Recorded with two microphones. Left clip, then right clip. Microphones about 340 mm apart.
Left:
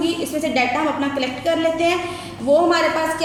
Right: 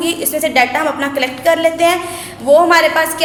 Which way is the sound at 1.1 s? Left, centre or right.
Right.